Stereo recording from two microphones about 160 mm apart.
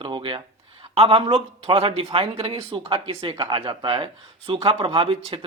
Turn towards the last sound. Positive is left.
turn(degrees=-35)  # may be behind; listen again after turning